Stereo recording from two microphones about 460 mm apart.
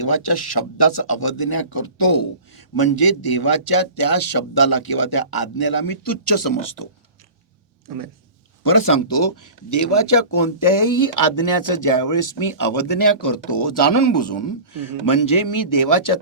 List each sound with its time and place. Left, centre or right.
0.0 s speech: left
8.6 s speech: left